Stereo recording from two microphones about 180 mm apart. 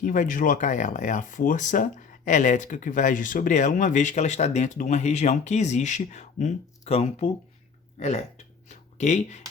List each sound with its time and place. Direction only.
0.0 s speech: 45° left (ahead or behind)